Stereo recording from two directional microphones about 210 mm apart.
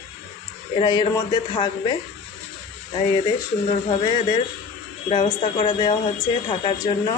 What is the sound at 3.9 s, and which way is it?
Speech, 20° left (ahead or behind).